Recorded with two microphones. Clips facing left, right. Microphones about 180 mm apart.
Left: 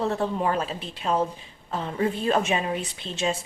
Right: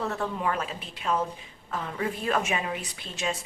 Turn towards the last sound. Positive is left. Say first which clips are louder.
# left 4 dB
turn(degrees=25)  # may be behind; listen again after turning